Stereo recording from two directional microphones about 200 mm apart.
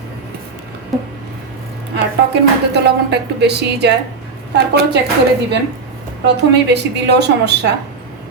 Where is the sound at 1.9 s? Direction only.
55° right (ahead or behind).